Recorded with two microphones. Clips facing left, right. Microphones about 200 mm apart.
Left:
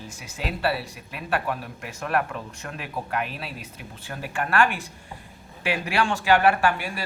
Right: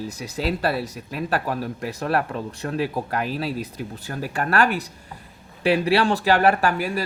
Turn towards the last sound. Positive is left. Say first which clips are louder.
# right 3 dB
turn(degrees=-40)  # may be behind; listen again after turning